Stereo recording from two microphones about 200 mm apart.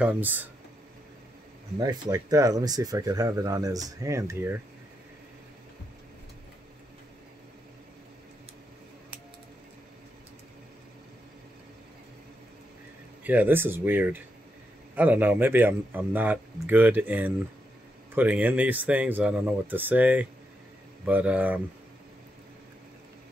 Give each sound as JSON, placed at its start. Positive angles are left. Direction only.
{"t": 0.0, "sound": "speech", "side_deg": -10}
{"t": 1.8, "sound": "speech", "side_deg": -15}
{"t": 13.2, "sound": "speech", "side_deg": -10}